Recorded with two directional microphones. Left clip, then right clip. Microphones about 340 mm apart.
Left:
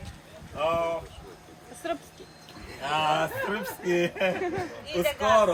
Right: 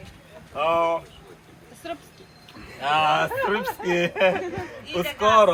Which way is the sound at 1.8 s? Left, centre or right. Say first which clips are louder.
Left 2 dB; centre.